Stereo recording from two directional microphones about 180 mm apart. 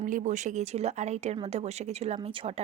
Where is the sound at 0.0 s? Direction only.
45° right (ahead or behind).